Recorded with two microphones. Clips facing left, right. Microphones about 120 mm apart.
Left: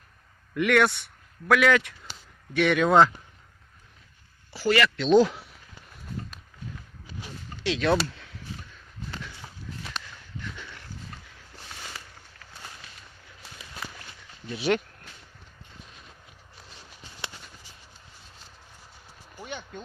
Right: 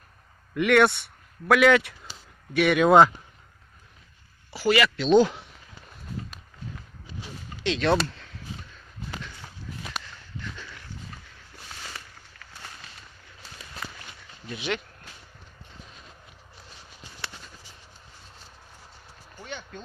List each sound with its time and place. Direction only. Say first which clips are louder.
0.5 s speech: right 2 dB; 5° right (ahead or behind)
4.5 s speech: right 1 dB; 15° right (ahead or behind)
5.0 s speech: even; centre (ahead or behind)
7.6 s speech: right 1 dB; 5° left (ahead or behind)
14.5 s speech: left 6 dB; 40° left (ahead or behind)
17.2 s a sound: even; 20° left (ahead or behind)
19.4 s a sound: left 1 dB; 10° left (ahead or behind)